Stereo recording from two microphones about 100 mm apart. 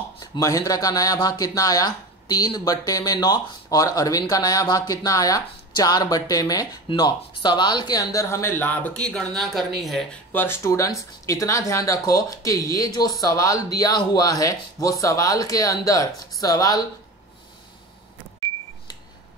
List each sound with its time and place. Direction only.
0.2 s speech: 40° left (ahead or behind); by 10.0 s centre (ahead or behind)
10.3 s speech: 25° left (ahead or behind); by 16.8 s 40° left (ahead or behind)